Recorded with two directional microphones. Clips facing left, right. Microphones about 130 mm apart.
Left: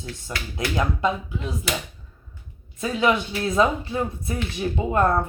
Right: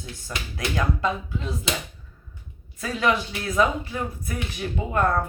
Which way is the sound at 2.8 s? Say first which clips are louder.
Left 2 dB; 20° left (ahead or behind).